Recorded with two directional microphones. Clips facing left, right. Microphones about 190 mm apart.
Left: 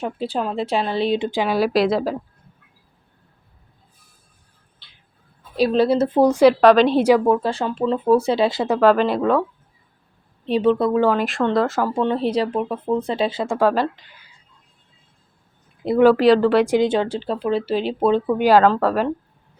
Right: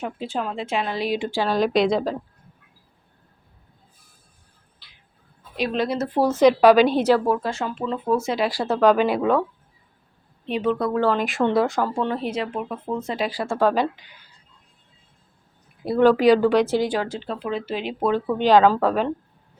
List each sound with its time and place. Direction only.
0.0 s a woman's voice: 35° left (ahead or behind); by 2.1 s 5° left (ahead or behind)
5.5 s a woman's voice: 35° left (ahead or behind); by 6.5 s 15° left (ahead or behind)
6.5 s speech: 5° right (ahead or behind)
7.3 s speech: 30° left (ahead or behind)
9.0 s speech: 5° right (ahead or behind)
10.5 s a woman's voice: 30° left (ahead or behind)
11.1 s speech: centre (ahead or behind)
11.9 s a woman's voice: 25° left (ahead or behind)
13.6 s speech: 5° left (ahead or behind)
16.0 s speech: 5° left (ahead or behind)
16.6 s speech: 20° left (ahead or behind)
18.3 s speech: 10° left (ahead or behind)
18.6 s speech: centre (ahead or behind)